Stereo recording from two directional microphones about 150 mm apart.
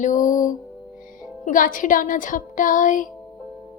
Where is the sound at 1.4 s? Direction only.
60° left (ahead or behind).